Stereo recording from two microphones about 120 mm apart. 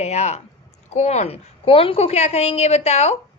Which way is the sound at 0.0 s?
70° left (ahead or behind).